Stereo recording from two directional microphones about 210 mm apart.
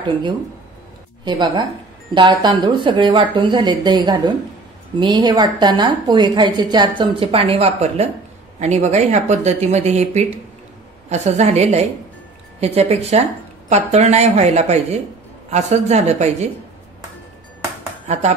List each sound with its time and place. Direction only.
1.2 s a woman's voice: 20° right (ahead or behind)
18.0 s speech: 35° right (ahead or behind)